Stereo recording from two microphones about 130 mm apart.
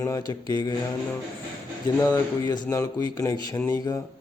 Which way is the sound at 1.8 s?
30° left (ahead or behind).